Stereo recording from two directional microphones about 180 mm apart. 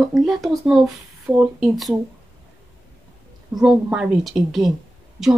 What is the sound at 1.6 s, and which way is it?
Speech, centre (ahead or behind).